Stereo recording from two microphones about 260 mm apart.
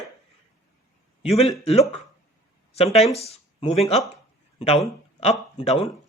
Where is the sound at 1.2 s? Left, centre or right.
Left.